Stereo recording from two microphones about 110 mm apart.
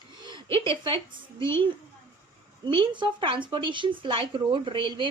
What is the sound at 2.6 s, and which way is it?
A woman's voice, 45° right (ahead or behind).